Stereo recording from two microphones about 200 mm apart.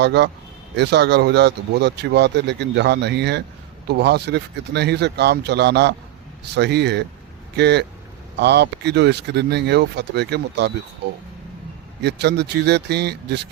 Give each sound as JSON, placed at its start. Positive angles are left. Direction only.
{"t": 0.0, "sound": "speech", "side_deg": -60}